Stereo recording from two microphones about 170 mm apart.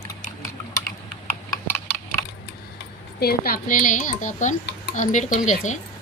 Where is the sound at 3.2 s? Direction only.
65° left (ahead or behind); by 5.8 s 45° left (ahead or behind).